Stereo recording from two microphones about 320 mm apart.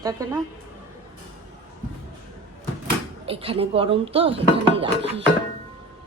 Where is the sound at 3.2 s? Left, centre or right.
Centre.